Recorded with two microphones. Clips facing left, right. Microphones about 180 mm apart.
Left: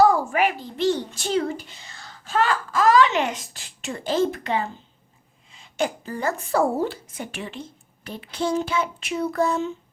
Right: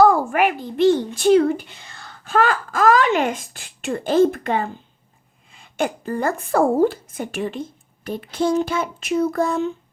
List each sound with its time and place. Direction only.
0.0 s a child's voice: 55° right (ahead or behind)